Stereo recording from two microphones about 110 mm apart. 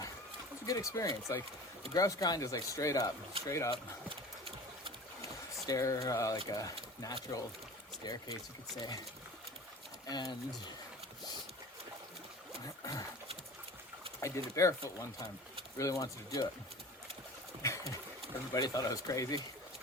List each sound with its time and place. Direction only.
0.6 s speech: 30° left (ahead or behind)
5.6 s speech: 30° left (ahead or behind)
10.1 s speech: 40° left (ahead or behind)
14.2 s speech: 30° left (ahead or behind)
17.6 s a sound: 30° left (ahead or behind)
18.5 s speech: 35° left (ahead or behind)